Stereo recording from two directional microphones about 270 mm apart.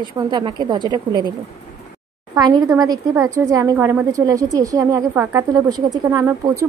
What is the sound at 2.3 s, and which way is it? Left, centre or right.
A woman's voice, centre.